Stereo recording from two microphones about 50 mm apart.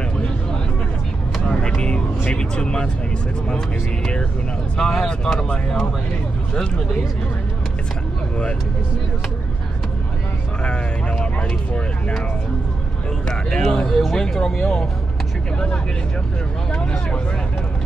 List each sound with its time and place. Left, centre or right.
1.8 s vehicle: centre
2.3 s speech: centre
10.6 s speech: left
13.3 s speech: centre
16.7 s speech: centre